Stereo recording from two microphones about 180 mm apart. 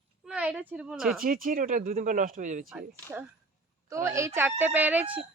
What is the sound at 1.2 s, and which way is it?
Speech, 50° right (ahead or behind).